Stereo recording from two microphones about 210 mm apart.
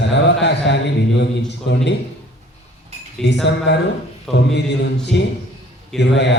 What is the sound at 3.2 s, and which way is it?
A man's voice, 55° left (ahead or behind).